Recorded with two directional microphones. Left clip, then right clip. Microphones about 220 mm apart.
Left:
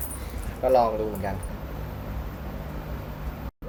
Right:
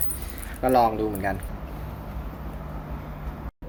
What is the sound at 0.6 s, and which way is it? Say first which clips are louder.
Speech: right 1 dB; 40° right (ahead or behind).